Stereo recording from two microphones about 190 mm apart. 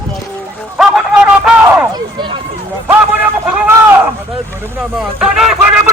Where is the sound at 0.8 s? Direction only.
5° right (ahead or behind).